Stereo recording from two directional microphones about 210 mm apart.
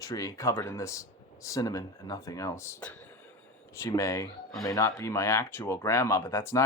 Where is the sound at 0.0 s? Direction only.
15° left (ahead or behind).